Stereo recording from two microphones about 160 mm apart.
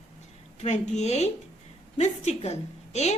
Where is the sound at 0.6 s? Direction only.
45° left (ahead or behind).